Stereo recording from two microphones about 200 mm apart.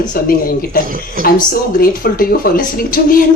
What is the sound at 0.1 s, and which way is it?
Speech, 45° left (ahead or behind).